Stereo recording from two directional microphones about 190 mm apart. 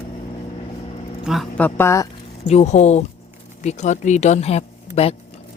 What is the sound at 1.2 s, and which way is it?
Speech, centre (ahead or behind).